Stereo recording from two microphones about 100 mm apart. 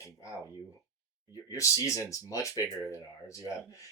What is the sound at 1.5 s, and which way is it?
Speech, 30° left (ahead or behind).